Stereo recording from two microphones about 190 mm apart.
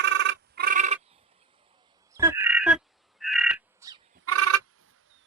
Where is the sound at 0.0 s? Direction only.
70° right (ahead or behind); by 0.9 s 40° right (ahead or behind).